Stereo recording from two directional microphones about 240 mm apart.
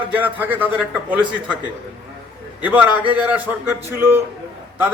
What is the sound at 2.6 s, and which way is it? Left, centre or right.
A man's voice, centre.